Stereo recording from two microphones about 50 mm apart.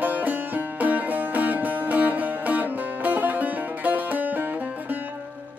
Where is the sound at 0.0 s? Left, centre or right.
Right.